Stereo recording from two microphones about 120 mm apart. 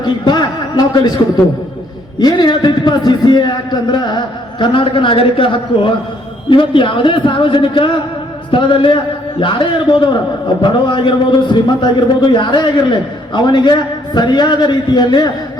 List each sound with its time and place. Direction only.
0.0 s a man's voice: 35° left (ahead or behind)